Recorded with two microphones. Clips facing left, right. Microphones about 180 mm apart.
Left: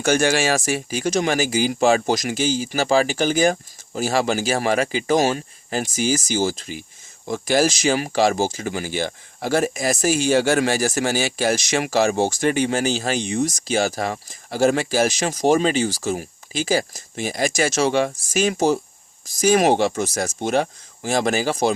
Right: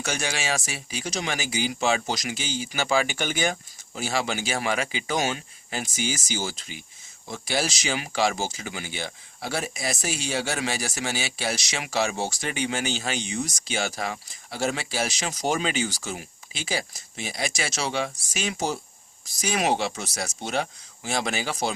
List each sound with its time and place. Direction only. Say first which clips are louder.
0.0 s speech: left 11 dB; 50° left (ahead or behind)
15.4 s speech: left 8 dB; 35° left (ahead or behind)